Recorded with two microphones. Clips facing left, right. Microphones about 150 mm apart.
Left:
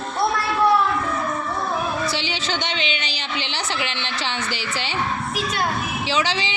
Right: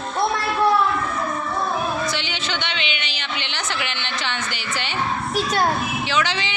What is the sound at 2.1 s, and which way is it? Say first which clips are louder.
A woman's voice: left 1 dB; 30° left (ahead or behind).